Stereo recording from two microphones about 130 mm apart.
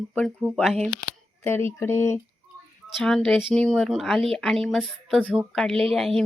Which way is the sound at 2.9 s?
5° left (ahead or behind).